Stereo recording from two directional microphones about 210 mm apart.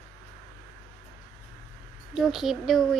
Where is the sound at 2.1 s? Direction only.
Centre (ahead or behind).